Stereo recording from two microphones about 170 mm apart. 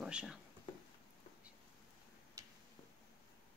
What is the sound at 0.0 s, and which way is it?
Speech, 5° right (ahead or behind).